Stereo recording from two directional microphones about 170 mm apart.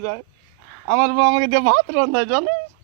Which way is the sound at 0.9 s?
90° right.